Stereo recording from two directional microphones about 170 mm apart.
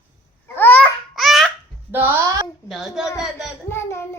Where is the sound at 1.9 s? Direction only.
10° right (ahead or behind).